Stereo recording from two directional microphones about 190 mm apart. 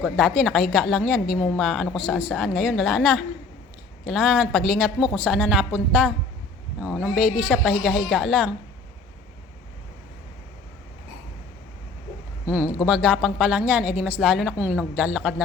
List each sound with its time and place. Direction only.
0.0 s a woman's voice: centre (ahead or behind)
12.5 s a woman's voice: 5° right (ahead or behind)